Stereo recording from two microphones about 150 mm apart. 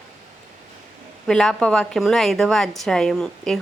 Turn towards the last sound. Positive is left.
turn(degrees=5)  # may be behind; listen again after turning